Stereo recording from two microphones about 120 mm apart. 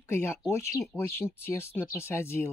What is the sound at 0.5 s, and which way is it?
Speech, 20° left (ahead or behind).